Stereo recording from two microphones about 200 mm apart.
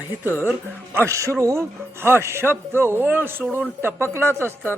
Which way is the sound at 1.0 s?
15° right (ahead or behind).